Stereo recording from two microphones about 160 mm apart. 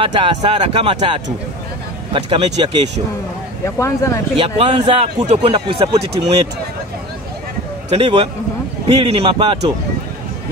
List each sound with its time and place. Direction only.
0.0 s speech: 35° right (ahead or behind)
3.6 s speech: 15° left (ahead or behind)
4.4 s speech: 35° right (ahead or behind)
7.9 s speech: 35° right (ahead or behind)